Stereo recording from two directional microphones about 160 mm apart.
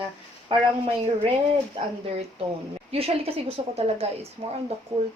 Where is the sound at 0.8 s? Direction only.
40° right (ahead or behind).